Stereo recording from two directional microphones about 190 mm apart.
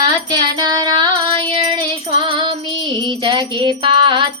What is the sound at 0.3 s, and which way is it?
Music, 20° right (ahead or behind).